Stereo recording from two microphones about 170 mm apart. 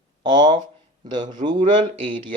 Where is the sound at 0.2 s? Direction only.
25° right (ahead or behind).